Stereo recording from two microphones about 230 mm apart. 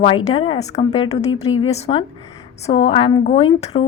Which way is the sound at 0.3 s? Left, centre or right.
Left.